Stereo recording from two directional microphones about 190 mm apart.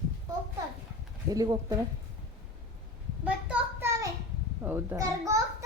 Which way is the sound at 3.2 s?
10° right (ahead or behind).